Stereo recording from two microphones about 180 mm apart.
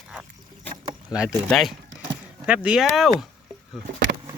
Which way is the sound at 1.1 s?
5° right (ahead or behind).